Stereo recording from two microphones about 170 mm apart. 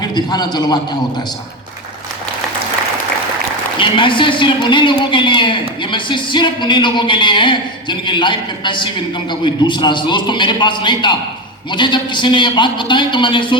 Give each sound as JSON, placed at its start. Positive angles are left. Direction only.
{"t": 0.0, "sound": "a man's voice", "side_deg": 25}
{"t": 3.8, "sound": "a man's voice", "side_deg": 30}